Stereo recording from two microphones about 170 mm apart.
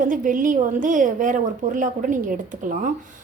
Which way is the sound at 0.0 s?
50° right (ahead or behind).